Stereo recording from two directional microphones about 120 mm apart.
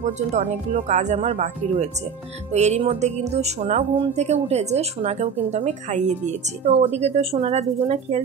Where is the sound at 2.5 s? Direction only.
70° right (ahead or behind).